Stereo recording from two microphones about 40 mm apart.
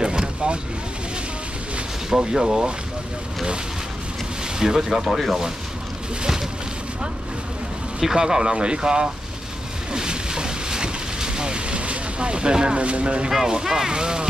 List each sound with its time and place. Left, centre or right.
0.0 s boat: right
2.3 s speech: centre
4.6 s speech: centre
8.0 s speech: centre
9.9 s boat: centre
13.5 s speech: centre